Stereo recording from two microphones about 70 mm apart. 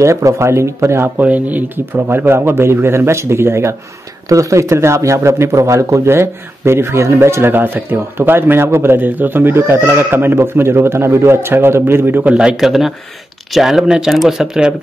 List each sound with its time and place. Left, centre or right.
0.0 s speech: right
1.1 s speech: right
2.0 s speech: right
12.2 s speech: centre